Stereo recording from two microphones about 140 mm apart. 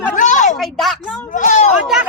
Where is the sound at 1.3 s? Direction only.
65° left (ahead or behind).